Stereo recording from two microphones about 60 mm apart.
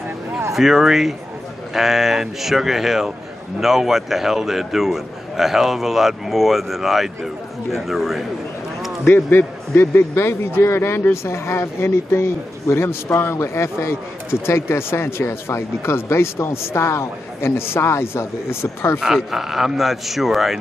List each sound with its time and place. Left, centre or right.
0.6 s a man's voice: centre
9.0 s a man's voice: left
13.4 s a man's voice: left
18.9 s a man's voice: centre